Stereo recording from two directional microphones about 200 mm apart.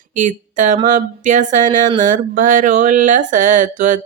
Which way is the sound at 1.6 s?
20° right (ahead or behind).